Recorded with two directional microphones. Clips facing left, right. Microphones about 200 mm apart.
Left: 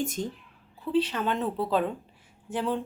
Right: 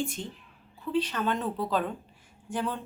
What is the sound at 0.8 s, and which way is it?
A woman's voice, 30° left (ahead or behind).